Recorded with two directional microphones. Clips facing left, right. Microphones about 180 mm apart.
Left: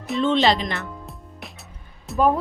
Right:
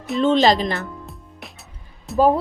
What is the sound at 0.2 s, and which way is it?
Speech, 40° right (ahead or behind).